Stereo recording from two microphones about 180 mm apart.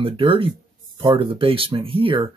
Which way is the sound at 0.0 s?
30° right (ahead or behind).